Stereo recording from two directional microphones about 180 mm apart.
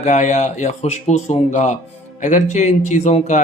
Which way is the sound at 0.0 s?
40° left (ahead or behind).